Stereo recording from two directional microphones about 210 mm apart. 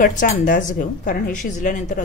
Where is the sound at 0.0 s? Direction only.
40° left (ahead or behind).